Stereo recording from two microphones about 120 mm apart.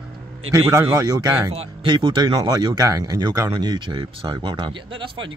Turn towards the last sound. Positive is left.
turn(degrees=-40)  # may be behind; listen again after turning